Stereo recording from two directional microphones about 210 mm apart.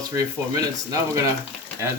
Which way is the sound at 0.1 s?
15° right (ahead or behind).